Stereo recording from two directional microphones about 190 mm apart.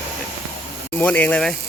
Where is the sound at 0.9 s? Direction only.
10° left (ahead or behind).